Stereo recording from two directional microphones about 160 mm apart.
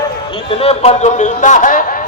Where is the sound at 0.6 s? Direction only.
40° left (ahead or behind).